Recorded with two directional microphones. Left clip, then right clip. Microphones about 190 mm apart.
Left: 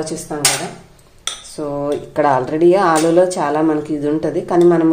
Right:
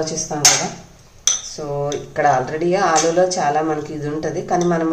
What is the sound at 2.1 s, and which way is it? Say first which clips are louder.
Speech: left 1 dB; 40° left (ahead or behind).